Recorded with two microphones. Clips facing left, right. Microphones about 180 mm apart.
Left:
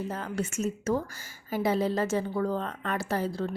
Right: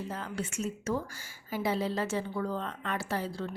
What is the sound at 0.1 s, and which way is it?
A woman's voice, 45° left (ahead or behind).